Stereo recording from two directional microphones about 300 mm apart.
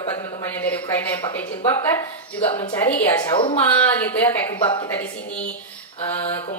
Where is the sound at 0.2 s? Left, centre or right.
Centre.